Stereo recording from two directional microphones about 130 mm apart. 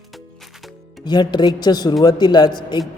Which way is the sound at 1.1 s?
35° left (ahead or behind).